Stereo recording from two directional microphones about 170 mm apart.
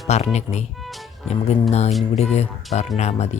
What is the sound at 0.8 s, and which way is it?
Music, centre (ahead or behind).